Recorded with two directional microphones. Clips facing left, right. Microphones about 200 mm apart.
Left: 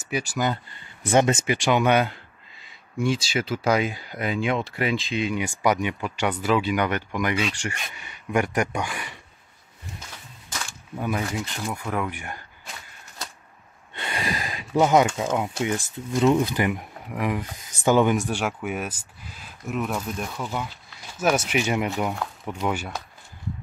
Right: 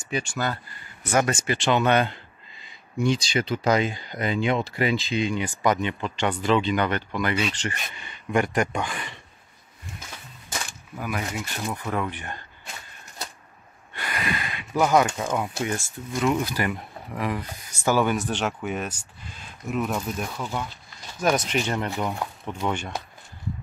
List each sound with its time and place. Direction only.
0.0 s speech: 5° left (ahead or behind)
1.1 s speech: 20° left (ahead or behind)
11.0 s speech: 25° left (ahead or behind)
11.7 s speech: 10° left (ahead or behind)
13.9 s a sound: 25° left (ahead or behind)
14.8 s speech: 20° left (ahead or behind)